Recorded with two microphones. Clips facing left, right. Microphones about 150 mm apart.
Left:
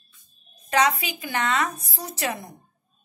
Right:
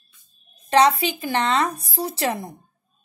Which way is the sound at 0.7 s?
30° right (ahead or behind).